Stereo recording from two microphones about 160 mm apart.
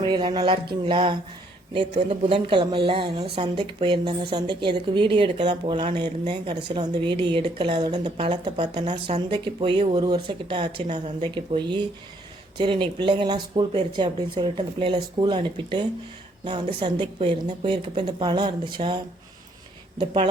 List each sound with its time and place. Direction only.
0.0 s speech: 30° right (ahead or behind)
8.9 s speech: 45° right (ahead or behind)
9.3 s speech: 30° right (ahead or behind)
10.0 s speech: 30° right (ahead or behind)